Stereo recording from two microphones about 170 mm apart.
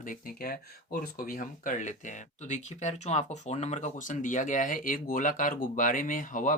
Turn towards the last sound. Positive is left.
turn(degrees=50)  # may be behind; listen again after turning